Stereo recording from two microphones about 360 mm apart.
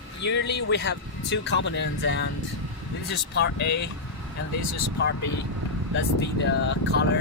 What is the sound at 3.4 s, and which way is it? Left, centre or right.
Speech, left.